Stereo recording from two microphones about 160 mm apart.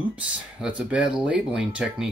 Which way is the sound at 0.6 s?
10° right (ahead or behind).